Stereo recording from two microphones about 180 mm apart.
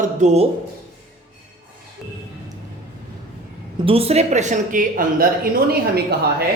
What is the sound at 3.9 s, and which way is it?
Speech, 35° right (ahead or behind).